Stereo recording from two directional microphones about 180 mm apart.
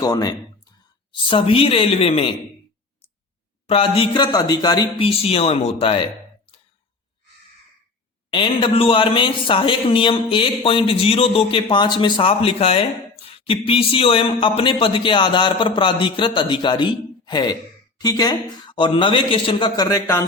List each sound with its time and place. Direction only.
0.0 s speech: 20° left (ahead or behind)
3.7 s speech: 30° left (ahead or behind)
8.3 s speech: 25° left (ahead or behind)